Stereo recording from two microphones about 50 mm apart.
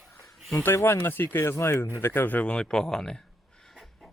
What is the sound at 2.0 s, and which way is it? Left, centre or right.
Speech, left.